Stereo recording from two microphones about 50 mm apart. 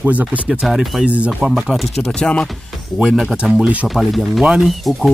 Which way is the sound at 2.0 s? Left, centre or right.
Centre.